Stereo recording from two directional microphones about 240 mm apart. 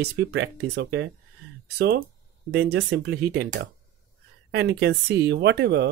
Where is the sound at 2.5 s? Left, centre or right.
Right.